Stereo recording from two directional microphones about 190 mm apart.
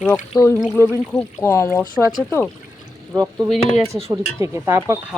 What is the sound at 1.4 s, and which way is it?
Speech, 15° left (ahead or behind).